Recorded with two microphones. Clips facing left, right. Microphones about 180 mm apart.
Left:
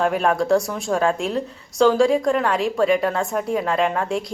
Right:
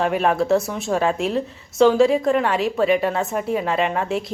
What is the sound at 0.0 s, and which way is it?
A woman's voice, centre (ahead or behind).